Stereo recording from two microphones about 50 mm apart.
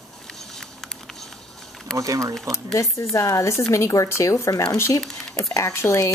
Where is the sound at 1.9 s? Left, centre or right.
Centre.